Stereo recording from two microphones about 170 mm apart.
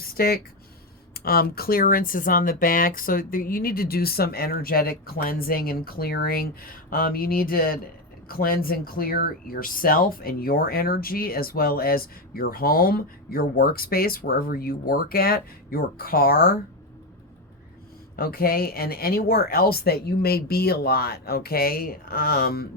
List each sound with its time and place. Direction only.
0.0 s a sound: 60° left (ahead or behind)
1.1 s speech: 65° left (ahead or behind)
18.2 s speech: 60° left (ahead or behind)